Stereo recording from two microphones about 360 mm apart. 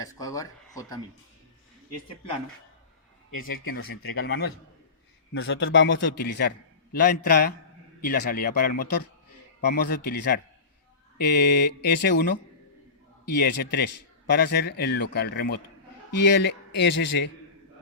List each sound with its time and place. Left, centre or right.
0.0 s speech: centre
3.7 s a man's voice: left
13.2 s a man's voice: left